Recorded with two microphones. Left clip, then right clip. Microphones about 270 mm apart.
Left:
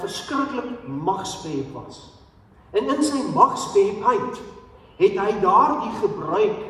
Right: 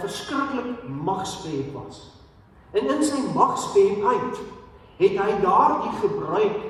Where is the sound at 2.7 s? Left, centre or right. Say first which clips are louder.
Left 1 dB; left.